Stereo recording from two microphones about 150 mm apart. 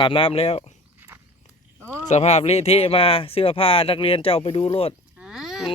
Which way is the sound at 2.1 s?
45° left (ahead or behind).